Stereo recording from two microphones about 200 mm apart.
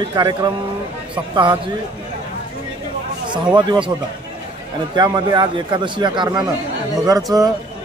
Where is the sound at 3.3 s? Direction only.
20° right (ahead or behind).